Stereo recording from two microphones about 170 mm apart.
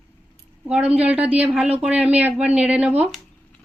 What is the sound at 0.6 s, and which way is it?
A woman's voice, 5° right (ahead or behind).